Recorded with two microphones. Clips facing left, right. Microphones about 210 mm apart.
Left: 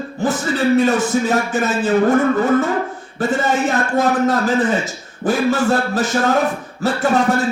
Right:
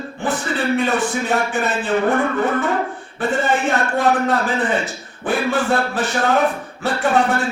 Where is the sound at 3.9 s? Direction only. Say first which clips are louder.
Left 3 dB; 40° left (ahead or behind).